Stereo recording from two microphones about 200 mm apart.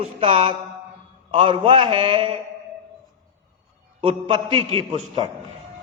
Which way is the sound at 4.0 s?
25° right (ahead or behind).